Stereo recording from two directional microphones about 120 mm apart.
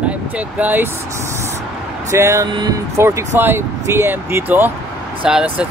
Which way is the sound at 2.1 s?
25° right (ahead or behind).